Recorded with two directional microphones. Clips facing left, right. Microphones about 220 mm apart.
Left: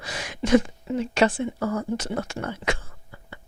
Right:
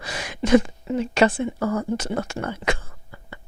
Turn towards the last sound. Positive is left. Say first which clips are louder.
# right 2 dB
turn(degrees=-75)  # may be behind; listen again after turning